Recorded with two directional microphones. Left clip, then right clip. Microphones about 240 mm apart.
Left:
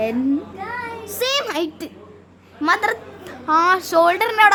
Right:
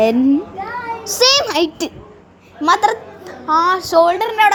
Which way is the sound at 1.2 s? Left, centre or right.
Centre.